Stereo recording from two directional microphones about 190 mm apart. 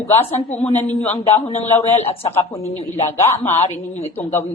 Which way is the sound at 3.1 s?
15° left (ahead or behind).